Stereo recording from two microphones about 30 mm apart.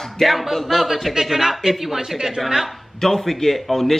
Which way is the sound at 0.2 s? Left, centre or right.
Centre.